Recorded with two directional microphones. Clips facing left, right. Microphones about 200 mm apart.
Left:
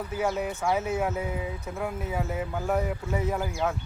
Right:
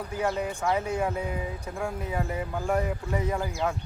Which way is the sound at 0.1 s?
5° left (ahead or behind).